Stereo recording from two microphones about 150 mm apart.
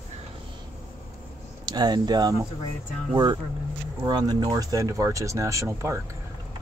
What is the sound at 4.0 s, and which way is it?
Speech, 25° right (ahead or behind).